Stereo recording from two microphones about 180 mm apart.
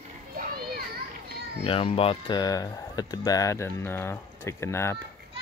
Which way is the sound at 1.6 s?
30° left (ahead or behind).